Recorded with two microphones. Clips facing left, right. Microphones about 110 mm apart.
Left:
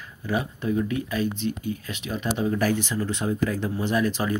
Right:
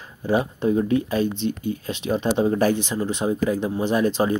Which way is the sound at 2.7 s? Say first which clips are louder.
Right 2 dB; 20° right (ahead or behind).